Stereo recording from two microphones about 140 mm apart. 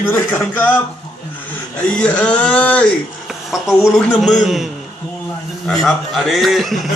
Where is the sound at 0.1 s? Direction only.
15° left (ahead or behind).